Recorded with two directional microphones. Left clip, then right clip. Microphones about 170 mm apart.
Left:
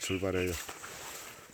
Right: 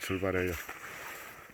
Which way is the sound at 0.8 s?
40° left (ahead or behind).